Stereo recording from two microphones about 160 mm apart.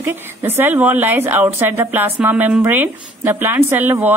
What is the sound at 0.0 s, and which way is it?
A woman's voice, 15° right (ahead or behind).